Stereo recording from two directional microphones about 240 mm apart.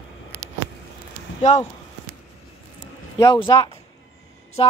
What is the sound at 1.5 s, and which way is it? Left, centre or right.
Speech, left.